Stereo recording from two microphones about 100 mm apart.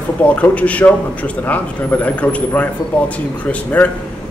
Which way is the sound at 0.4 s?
15° left (ahead or behind).